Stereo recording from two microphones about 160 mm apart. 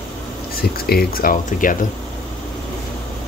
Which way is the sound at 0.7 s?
70° left (ahead or behind).